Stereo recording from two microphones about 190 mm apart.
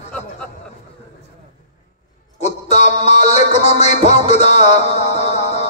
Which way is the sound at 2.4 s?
35° left (ahead or behind).